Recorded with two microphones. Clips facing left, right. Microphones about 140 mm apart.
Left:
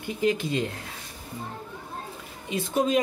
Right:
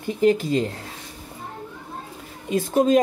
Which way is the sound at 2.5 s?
45° right (ahead or behind).